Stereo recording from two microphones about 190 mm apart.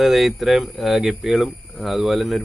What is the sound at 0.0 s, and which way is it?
Speech, centre (ahead or behind).